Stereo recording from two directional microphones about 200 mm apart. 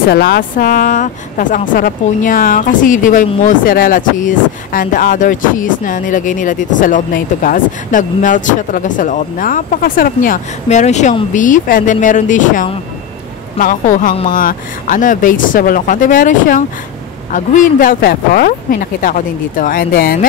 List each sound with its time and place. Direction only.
0.1 s speech: 50° left (ahead or behind)